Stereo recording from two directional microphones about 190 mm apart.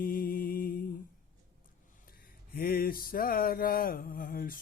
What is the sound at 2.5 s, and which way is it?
Mantra, 50° left (ahead or behind).